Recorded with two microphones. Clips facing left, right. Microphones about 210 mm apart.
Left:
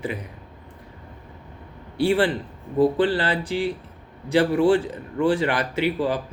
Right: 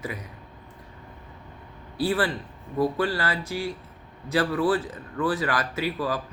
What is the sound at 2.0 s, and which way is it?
A man's voice, 30° left (ahead or behind).